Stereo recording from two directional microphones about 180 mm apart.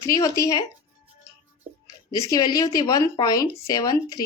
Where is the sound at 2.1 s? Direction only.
20° left (ahead or behind).